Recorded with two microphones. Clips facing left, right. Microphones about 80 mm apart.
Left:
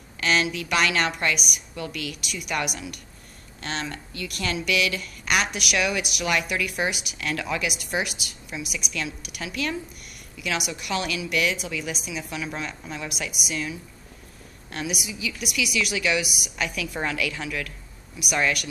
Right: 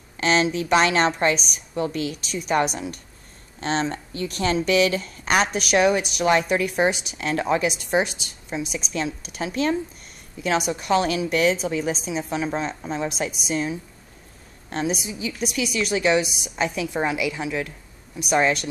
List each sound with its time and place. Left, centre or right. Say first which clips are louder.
0.2 s a woman's voice: right 4 dB; right